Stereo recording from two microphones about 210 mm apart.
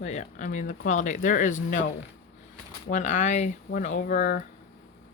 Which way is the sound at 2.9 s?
35° left (ahead or behind).